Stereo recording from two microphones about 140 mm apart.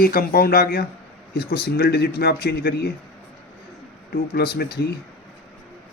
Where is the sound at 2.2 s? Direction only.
90° left.